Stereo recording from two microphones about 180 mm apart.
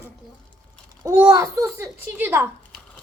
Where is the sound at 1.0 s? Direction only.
15° right (ahead or behind).